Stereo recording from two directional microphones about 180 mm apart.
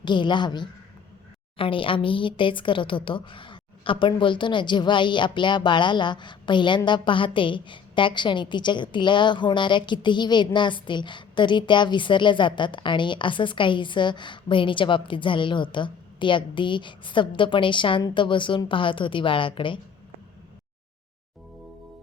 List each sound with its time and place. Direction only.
0.0 s speech: 25° left (ahead or behind)